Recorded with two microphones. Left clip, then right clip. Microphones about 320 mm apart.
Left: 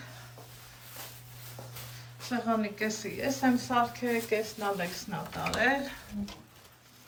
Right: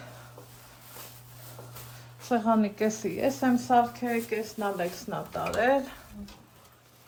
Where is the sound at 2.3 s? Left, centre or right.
Centre.